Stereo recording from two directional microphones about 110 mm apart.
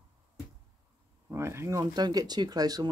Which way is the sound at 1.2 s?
25° right (ahead or behind).